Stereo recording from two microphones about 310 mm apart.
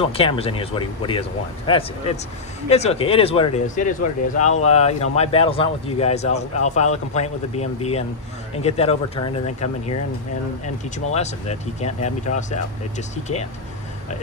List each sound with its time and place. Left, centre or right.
0.0 s speech: centre
11.1 s speech: left
13.1 s speech: left